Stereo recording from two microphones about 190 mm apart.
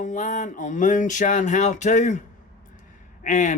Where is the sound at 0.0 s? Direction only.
40° left (ahead or behind).